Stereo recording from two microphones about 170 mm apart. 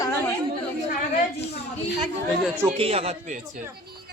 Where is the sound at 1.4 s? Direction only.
75° left (ahead or behind).